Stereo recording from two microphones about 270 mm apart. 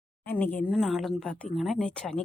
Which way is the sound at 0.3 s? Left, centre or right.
Centre.